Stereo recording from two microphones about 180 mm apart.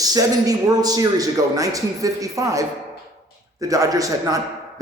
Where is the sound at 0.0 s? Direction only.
20° right (ahead or behind).